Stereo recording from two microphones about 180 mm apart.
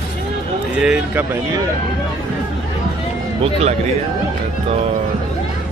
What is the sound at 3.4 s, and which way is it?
Speech, 35° right (ahead or behind).